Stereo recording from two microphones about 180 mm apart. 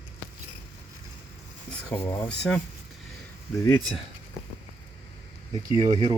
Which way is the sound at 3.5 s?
15° left (ahead or behind).